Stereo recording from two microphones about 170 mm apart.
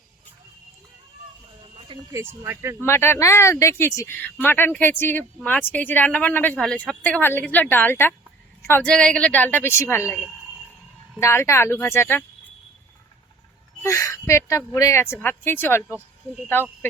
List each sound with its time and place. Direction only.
1.7 s a sound: 40° right (ahead or behind)
2.4 s speech: 15° right (ahead or behind)
2.8 s speech: 15° left (ahead or behind)
11.2 s speech: 15° left (ahead or behind)
13.8 s speech: 15° left (ahead or behind)